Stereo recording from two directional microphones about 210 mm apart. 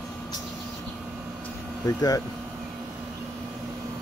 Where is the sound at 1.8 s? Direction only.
15° left (ahead or behind).